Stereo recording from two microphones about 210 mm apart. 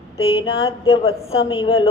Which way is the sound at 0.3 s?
25° left (ahead or behind).